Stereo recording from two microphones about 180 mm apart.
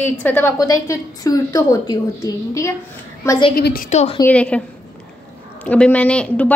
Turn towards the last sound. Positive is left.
turn(degrees=10)  # may be behind; listen again after turning